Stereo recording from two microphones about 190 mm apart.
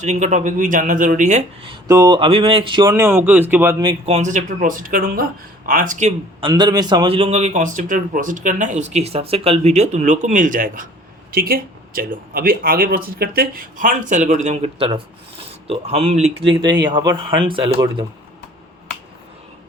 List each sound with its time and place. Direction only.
0.0 s a man's voice: 40° right (ahead or behind)
1.6 s speech: 20° right (ahead or behind)
2.9 s speech: 15° right (ahead or behind)
4.0 s speech: 35° right (ahead or behind)
6.4 s a man's voice: 20° right (ahead or behind)
16.9 s speech: 25° right (ahead or behind)